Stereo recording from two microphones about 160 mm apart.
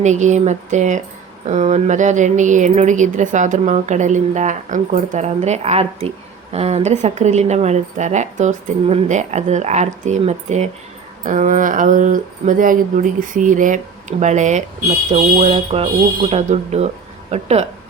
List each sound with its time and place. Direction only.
0.0 s speech: 45° right (ahead or behind)